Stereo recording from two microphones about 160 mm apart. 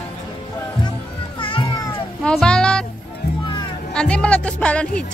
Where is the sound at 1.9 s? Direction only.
5° left (ahead or behind).